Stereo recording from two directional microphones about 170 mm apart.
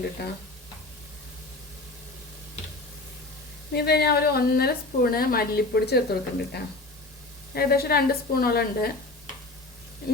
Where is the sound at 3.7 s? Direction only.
70° left (ahead or behind).